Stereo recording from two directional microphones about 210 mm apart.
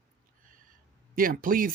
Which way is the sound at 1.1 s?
40° right (ahead or behind).